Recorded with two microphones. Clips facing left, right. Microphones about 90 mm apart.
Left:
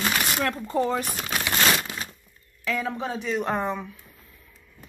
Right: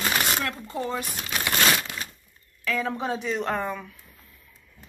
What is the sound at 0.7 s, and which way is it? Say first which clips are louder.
Speech: left 8 dB; 35° left (ahead or behind).